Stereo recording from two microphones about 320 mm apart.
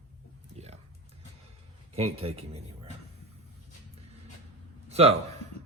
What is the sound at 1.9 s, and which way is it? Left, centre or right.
Speech, centre.